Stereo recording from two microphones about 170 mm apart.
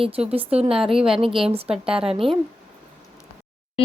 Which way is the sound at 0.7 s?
5° right (ahead or behind).